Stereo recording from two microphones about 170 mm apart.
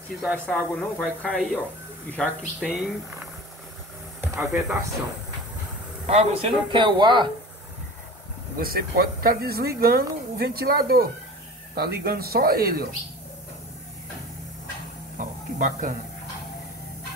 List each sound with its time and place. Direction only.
0.5 s speech: 5° left (ahead or behind)
4.2 s speech: 10° right (ahead or behind)
6.0 s speech: 40° right (ahead or behind)
8.5 s speech: 60° right (ahead or behind)
15.1 s a sound: 50° right (ahead or behind)